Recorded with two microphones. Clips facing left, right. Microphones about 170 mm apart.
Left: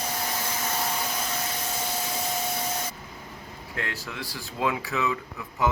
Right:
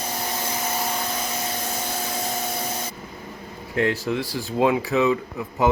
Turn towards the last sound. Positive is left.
turn(degrees=-30)  # may be behind; listen again after turning